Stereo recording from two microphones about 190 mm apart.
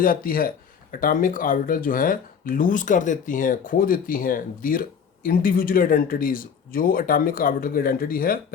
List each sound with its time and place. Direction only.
0.0 s speech: 50° left (ahead or behind)